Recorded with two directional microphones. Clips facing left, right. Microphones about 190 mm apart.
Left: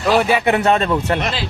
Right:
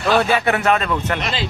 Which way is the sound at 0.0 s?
10° left (ahead or behind).